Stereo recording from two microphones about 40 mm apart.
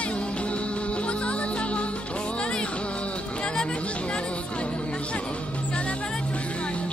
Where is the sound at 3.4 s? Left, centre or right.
Left.